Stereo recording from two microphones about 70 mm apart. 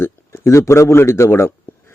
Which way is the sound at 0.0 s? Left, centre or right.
Left.